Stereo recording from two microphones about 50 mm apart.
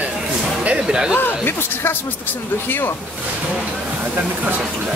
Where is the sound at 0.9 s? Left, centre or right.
Centre.